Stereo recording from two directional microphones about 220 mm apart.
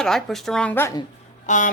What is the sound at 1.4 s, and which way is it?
Speech, 35° left (ahead or behind).